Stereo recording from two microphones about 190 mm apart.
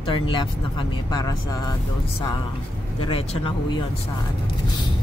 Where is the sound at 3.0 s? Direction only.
30° left (ahead or behind).